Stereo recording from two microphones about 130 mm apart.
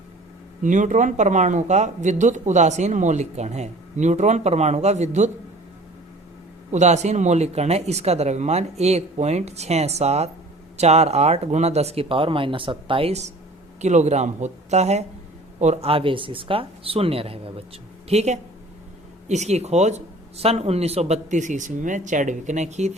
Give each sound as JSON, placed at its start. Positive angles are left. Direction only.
{"t": 0.6, "sound": "speech", "side_deg": -75}
{"t": 6.7, "sound": "speech", "side_deg": -65}